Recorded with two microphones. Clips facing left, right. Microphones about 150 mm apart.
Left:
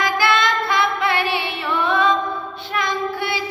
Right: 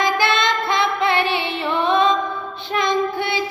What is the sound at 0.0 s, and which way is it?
Female singing, 20° right (ahead or behind).